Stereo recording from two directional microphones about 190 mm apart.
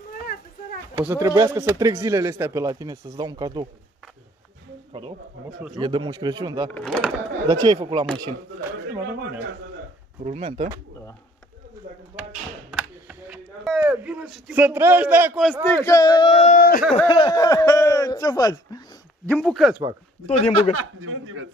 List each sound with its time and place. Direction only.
1.0 s speech: 10° right (ahead or behind)
5.8 s speech: 25° right (ahead or behind)
6.7 s speech: 5° left (ahead or behind)
7.4 s speech: 20° right (ahead or behind)
10.2 s speech: 30° right (ahead or behind)
12.7 s a sound: 5° right (ahead or behind)
15.7 s a man's voice: 15° left (ahead or behind)
16.3 s speech: 45° left (ahead or behind)
17.1 s speech: 25° left (ahead or behind)
19.2 s speech: 5° left (ahead or behind)
20.2 s speech: 35° left (ahead or behind)
20.7 s a man's voice: 90° right